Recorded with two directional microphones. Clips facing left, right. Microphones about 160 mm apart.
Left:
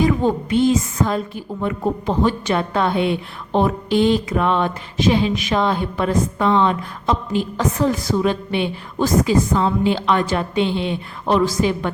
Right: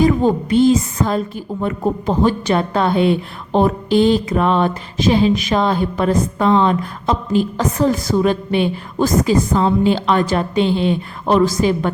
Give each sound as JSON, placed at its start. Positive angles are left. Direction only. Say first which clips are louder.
{"t": 0.0, "sound": "a woman's voice", "louder": "right 3 dB", "side_deg": -35}